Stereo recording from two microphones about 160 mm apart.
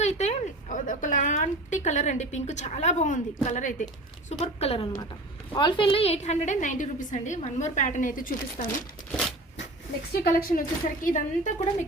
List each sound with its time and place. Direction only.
0.0 s a woman's voice: 45° left (ahead or behind)
10.1 s a woman's voice: 65° left (ahead or behind)